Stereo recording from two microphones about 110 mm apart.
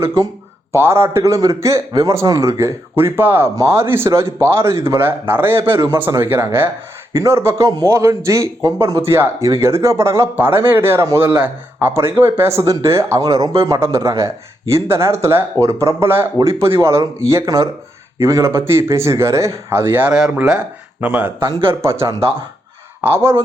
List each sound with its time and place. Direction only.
0.0 s speech: 25° right (ahead or behind)
1.9 s a man's voice: 40° right (ahead or behind)
11.3 s speech: 15° right (ahead or behind)